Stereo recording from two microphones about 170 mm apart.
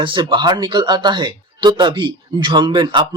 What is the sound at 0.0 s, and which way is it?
Speech, 30° right (ahead or behind).